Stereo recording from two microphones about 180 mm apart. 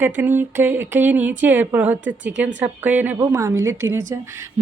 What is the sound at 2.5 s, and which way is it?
Speech, 10° right (ahead or behind).